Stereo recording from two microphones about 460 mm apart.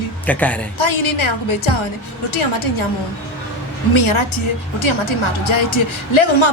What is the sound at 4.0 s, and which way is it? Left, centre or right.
Speech, left.